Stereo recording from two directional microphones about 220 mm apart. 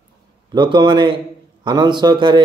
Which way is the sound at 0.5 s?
20° right (ahead or behind).